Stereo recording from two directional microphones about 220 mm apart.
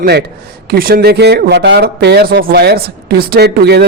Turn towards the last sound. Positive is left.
turn(degrees=-45)  # may be behind; listen again after turning